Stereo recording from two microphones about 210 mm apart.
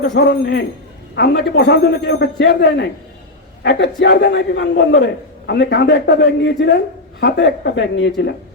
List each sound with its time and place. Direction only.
0.1 s a woman's voice: 55° left (ahead or behind)